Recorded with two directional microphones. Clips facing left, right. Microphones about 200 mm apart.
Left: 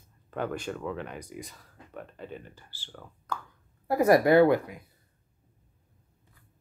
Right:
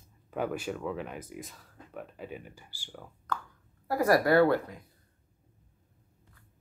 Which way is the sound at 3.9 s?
20° left (ahead or behind).